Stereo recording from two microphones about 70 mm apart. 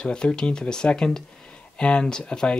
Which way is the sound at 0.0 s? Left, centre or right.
Centre.